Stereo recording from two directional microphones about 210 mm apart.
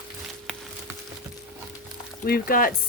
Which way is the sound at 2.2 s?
45° left (ahead or behind).